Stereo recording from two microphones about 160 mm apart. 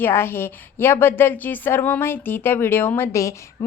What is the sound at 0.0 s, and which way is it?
A woman's voice, 15° left (ahead or behind).